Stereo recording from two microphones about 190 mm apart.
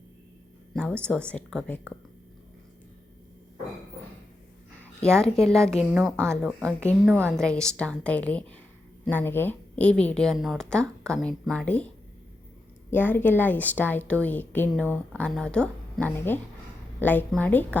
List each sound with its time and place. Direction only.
0.7 s a sound: 5° left (ahead or behind)
1.0 s a woman's voice: 5° left (ahead or behind)
5.2 s a woman's voice: 5° left (ahead or behind)
12.9 s a woman's voice: 10° left (ahead or behind)